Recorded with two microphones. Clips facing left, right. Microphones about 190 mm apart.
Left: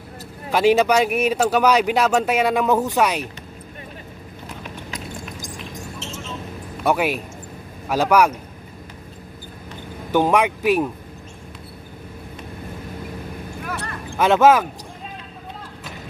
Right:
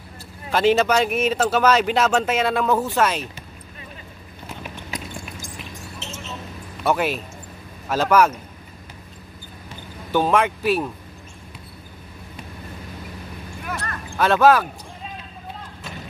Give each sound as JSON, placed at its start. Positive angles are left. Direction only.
{"t": 0.5, "sound": "speech", "side_deg": 10}
{"t": 6.8, "sound": "speech", "side_deg": 10}
{"t": 10.1, "sound": "speech", "side_deg": 15}
{"t": 13.8, "sound": "a sound", "side_deg": 15}